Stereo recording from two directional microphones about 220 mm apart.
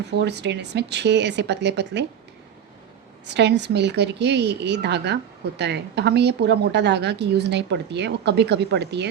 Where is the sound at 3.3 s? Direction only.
50° right (ahead or behind).